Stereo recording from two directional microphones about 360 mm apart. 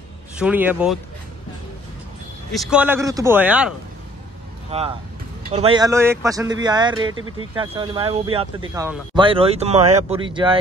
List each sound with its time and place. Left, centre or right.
0.4 s speech: centre
2.5 s speech: centre
4.6 s speech: centre
7.2 s speech: right
7.5 s speech: centre